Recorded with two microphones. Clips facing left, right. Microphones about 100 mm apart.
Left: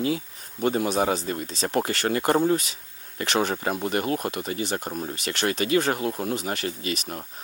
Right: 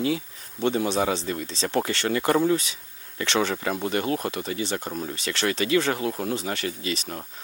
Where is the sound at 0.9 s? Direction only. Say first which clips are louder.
Left 1 dB; 35° left (ahead or behind).